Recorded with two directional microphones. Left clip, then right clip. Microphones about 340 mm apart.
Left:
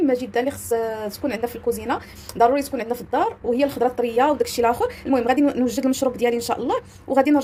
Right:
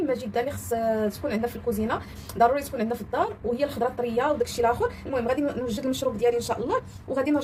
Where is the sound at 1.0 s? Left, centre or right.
Left.